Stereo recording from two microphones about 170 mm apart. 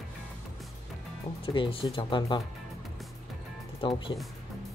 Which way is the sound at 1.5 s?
30° left (ahead or behind).